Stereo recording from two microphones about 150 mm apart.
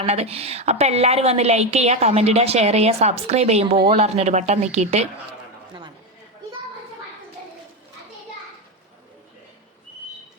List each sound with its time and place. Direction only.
0.0 s a woman's voice: 45° right (ahead or behind)